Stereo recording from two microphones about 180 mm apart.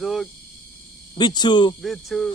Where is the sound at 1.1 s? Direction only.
25° left (ahead or behind).